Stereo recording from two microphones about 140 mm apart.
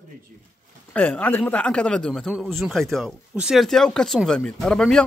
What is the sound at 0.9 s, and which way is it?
Speech, 10° left (ahead or behind).